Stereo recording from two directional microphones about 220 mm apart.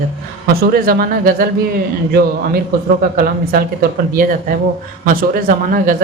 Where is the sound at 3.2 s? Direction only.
40° right (ahead or behind).